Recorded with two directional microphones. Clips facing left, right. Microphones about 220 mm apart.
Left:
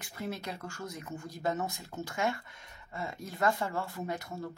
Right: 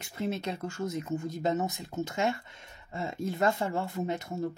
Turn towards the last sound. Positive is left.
turn(degrees=-25)  # may be behind; listen again after turning